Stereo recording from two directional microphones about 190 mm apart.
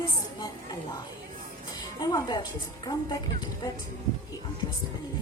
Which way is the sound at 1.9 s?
20° left (ahead or behind).